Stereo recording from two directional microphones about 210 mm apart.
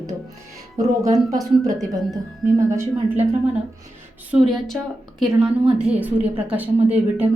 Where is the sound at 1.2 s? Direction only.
15° right (ahead or behind).